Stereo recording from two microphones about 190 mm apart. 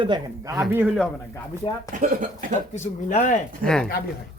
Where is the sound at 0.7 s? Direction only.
10° right (ahead or behind).